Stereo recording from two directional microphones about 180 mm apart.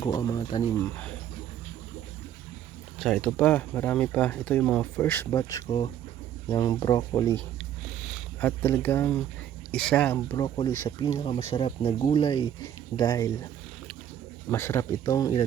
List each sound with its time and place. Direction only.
0.0 s speech: 20° left (ahead or behind)
0.8 s speech: 10° left (ahead or behind)
3.0 s speech: 5° left (ahead or behind); by 7.3 s 20° left (ahead or behind)
8.0 s speech: 10° left (ahead or behind)
14.5 s speech: 15° left (ahead or behind)